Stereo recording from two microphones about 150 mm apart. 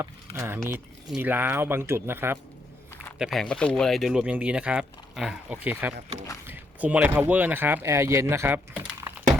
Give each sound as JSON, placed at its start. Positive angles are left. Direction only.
{"t": 0.0, "sound": "speech", "side_deg": -15}
{"t": 3.2, "sound": "speech", "side_deg": 0}